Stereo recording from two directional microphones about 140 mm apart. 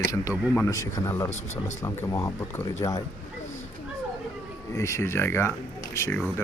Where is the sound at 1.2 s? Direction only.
55° left (ahead or behind).